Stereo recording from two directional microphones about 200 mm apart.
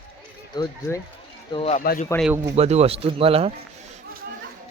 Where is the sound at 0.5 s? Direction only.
20° left (ahead or behind).